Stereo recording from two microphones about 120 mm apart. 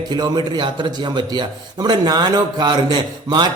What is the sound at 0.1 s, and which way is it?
A man's voice, 35° right (ahead or behind).